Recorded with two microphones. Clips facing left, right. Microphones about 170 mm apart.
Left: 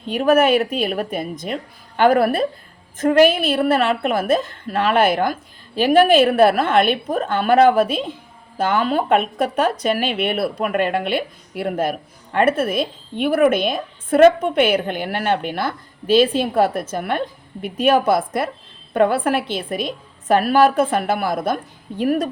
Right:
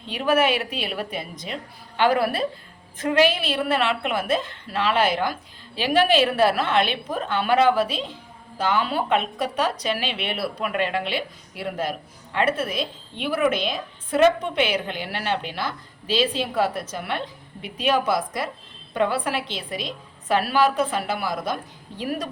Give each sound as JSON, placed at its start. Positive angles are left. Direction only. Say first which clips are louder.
{"t": 0.1, "sound": "a woman's voice", "louder": "left 6 dB", "side_deg": 45}